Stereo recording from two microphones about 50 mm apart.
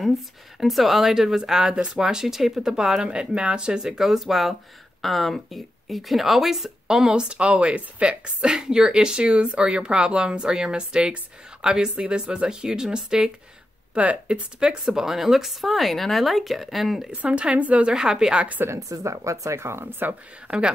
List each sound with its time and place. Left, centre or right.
0.6 s speech: centre
13.9 s speech: right
14.9 s speech: centre
17.1 s speech: right
17.9 s speech: centre
18.7 s speech: right
20.0 s speech: right